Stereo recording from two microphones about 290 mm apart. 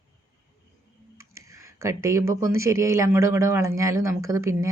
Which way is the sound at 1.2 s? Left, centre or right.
Centre.